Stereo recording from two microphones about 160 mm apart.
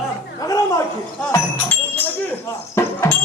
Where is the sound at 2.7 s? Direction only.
15° left (ahead or behind).